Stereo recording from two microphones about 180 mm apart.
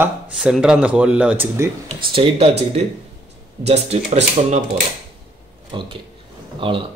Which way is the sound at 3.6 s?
35° right (ahead or behind).